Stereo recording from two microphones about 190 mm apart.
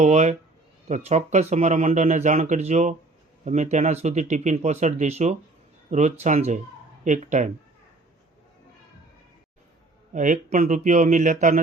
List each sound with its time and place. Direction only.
0.0 s speech: 35° right (ahead or behind)
10.1 s speech: 40° right (ahead or behind)